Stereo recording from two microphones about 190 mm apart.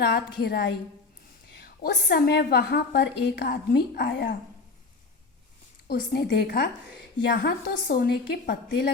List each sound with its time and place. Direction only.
0.0 s a woman's voice: 55° left (ahead or behind)
5.9 s a woman's voice: 55° left (ahead or behind)